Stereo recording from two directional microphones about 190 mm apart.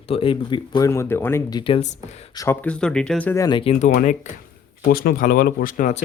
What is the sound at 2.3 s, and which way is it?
Speech, 15° left (ahead or behind).